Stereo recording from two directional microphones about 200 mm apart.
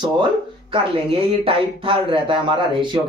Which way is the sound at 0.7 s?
25° right (ahead or behind).